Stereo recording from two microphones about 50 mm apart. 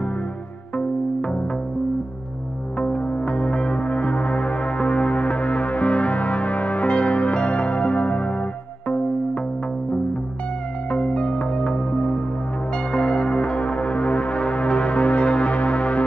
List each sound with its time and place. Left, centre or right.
0.7 s music: left
2.8 s music: left
10.9 s music: left